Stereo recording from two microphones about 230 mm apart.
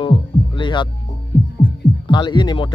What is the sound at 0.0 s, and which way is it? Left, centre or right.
Music, left.